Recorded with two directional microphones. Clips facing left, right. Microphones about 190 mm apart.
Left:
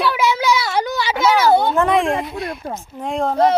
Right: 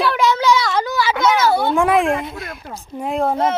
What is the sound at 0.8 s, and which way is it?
Speech, 20° left (ahead or behind).